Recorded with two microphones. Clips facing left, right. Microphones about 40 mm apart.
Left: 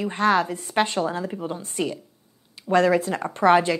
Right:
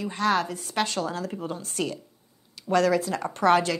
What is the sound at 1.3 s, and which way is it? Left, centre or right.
Speech, centre.